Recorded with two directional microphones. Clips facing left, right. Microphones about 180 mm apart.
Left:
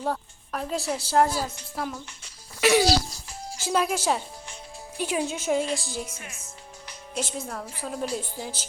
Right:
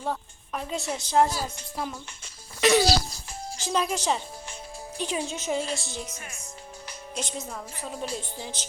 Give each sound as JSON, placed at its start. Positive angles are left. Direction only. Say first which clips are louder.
{"t": 0.0, "sound": "a woman's voice", "louder": "left 2 dB", "side_deg": 0}
{"t": 2.6, "sound": "music", "louder": "even", "side_deg": 10}
{"t": 3.6, "sound": "speech", "louder": "left 2 dB", "side_deg": 5}
{"t": 6.1, "sound": "speech", "louder": "even", "side_deg": -40}
{"t": 7.2, "sound": "speech", "louder": "left 3 dB", "side_deg": 0}